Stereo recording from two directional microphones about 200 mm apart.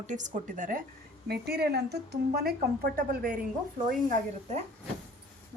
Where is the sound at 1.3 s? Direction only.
50° right (ahead or behind).